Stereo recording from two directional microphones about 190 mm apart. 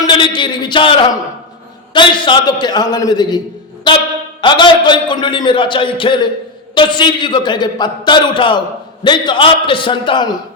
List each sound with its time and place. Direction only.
0.0 s a man's voice: 25° left (ahead or behind)